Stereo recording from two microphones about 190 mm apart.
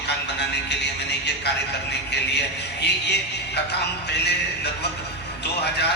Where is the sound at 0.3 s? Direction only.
65° left (ahead or behind).